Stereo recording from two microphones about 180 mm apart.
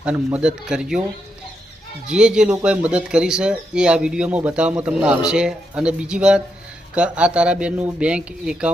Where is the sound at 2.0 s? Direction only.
5° right (ahead or behind).